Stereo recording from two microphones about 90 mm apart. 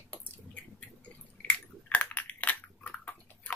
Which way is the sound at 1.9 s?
15° left (ahead or behind).